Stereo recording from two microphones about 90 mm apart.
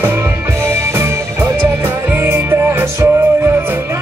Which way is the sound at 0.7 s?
25° right (ahead or behind).